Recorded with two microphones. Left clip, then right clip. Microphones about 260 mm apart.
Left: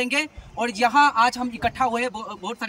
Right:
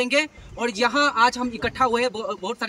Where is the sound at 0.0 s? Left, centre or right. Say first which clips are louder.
Right 2 dB; centre.